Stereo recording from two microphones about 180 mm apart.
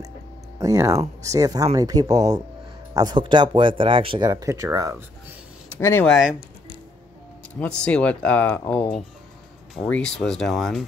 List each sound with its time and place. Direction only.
0.6 s speech: 20° right (ahead or behind)
4.3 s speech: 20° right (ahead or behind)
5.8 s speech: 15° left (ahead or behind)
7.6 s speech: 5° left (ahead or behind)